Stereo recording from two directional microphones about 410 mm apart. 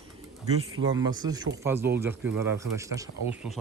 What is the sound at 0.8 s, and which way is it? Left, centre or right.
Speech, centre.